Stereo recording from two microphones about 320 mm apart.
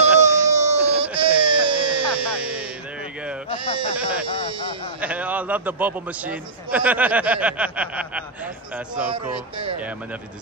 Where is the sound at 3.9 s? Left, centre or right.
Centre.